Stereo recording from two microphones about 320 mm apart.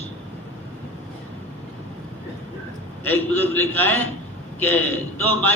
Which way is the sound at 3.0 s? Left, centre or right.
Centre.